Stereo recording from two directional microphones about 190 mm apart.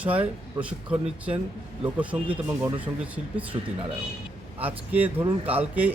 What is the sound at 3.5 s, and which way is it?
Speech, 25° right (ahead or behind).